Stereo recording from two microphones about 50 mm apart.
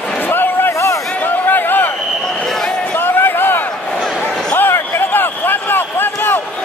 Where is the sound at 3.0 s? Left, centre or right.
Left.